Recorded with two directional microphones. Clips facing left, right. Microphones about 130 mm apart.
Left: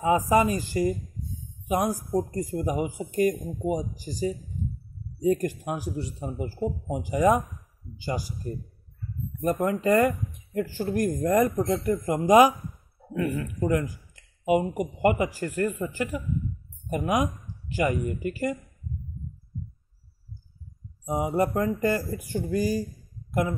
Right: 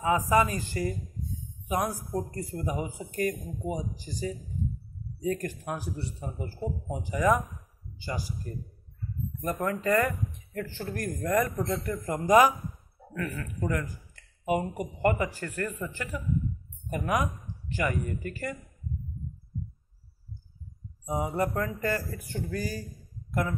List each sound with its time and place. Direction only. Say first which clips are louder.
0.1 s speech: left 3 dB; 20° left (ahead or behind)
16.9 s speech: left 3 dB; 20° left (ahead or behind)
21.0 s speech: left 4 dB; 20° left (ahead or behind)